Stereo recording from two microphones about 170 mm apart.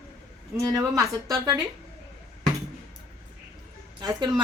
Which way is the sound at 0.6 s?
20° right (ahead or behind).